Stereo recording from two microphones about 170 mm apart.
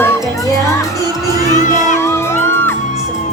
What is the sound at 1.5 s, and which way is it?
Children shouting, 45° left (ahead or behind).